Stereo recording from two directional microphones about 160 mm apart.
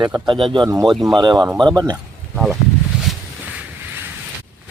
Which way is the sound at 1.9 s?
Centre (ahead or behind).